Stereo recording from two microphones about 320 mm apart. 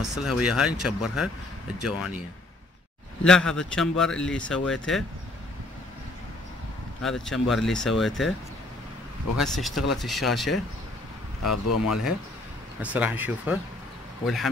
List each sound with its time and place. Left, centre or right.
0.1 s speech: centre
3.3 s speech: centre
7.0 s speech: centre
9.4 s speech: centre
11.4 s speech: left
12.9 s speech: centre